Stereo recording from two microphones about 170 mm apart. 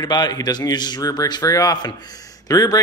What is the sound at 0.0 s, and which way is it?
A man's voice, 20° left (ahead or behind).